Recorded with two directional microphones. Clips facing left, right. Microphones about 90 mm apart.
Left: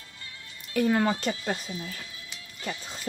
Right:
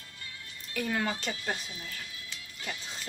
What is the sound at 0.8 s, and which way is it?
Speech, 40° left (ahead or behind).